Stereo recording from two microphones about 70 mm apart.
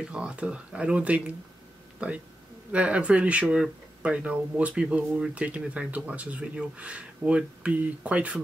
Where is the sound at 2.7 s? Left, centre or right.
Centre.